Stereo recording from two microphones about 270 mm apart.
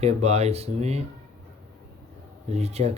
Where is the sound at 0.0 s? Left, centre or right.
Right.